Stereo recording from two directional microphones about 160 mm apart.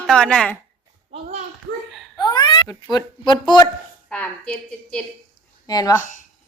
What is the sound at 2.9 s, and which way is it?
Speech, 25° left (ahead or behind).